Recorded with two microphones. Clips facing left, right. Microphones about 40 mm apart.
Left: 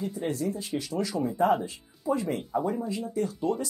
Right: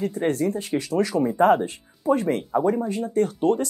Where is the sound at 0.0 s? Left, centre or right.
Right.